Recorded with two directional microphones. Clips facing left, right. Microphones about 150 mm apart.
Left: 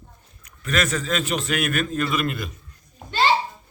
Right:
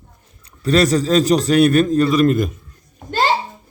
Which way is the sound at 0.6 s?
35° right (ahead or behind).